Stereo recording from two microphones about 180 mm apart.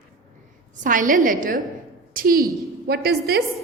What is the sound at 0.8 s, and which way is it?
A woman's voice, 50° right (ahead or behind).